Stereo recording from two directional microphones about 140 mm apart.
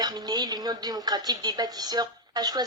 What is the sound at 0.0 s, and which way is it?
Speech, 30° right (ahead or behind).